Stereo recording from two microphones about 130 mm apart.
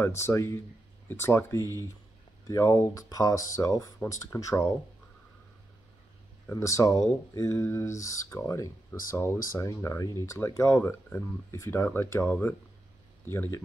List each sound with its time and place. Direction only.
0.2 s speech: 20° left (ahead or behind)
6.5 s speech: 25° left (ahead or behind)